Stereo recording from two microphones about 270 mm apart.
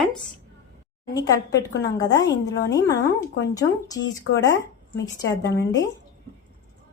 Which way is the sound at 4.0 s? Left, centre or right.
Left.